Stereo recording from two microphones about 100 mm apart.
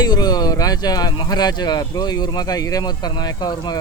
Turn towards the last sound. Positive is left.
turn(degrees=40)  # may be behind; listen again after turning